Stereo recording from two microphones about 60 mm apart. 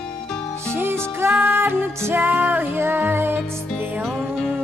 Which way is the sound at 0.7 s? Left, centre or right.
Right.